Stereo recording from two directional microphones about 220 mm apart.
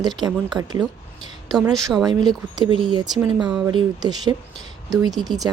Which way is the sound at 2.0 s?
20° right (ahead or behind).